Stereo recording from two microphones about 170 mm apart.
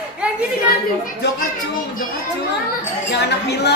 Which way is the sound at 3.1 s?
75° left (ahead or behind).